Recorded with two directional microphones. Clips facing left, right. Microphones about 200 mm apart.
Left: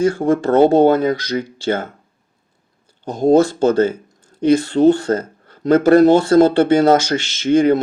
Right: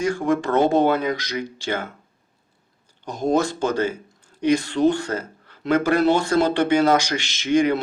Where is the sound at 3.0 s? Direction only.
40° left (ahead or behind).